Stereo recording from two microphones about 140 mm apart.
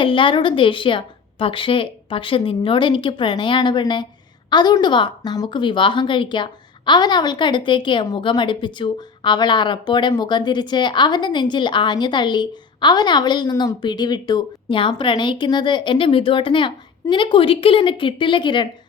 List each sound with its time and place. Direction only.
0.0 s a woman's voice: 35° left (ahead or behind)